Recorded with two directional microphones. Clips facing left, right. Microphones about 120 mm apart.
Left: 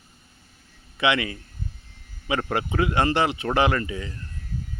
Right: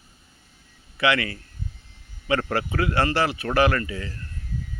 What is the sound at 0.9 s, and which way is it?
Speech, 20° left (ahead or behind).